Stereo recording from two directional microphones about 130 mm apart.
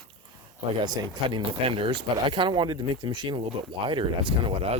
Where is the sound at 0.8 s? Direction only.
35° right (ahead or behind).